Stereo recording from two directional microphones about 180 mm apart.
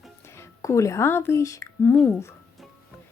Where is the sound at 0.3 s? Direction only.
15° left (ahead or behind).